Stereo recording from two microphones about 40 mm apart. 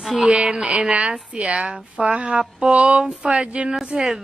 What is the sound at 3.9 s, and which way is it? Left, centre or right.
Speech, right.